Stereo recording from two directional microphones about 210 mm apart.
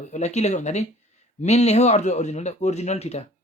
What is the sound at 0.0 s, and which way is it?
A man's voice, 35° left (ahead or behind).